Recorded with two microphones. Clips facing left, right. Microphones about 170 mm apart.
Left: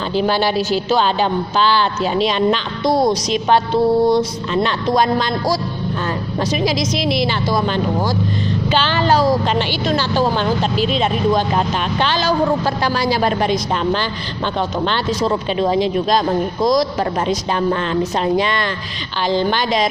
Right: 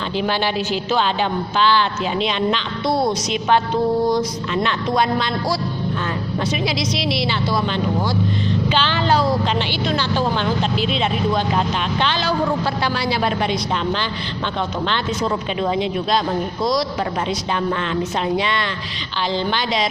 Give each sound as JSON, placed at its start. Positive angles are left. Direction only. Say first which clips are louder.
{"t": 0.2, "sound": "a woman's voice", "louder": "left 4 dB", "side_deg": 40}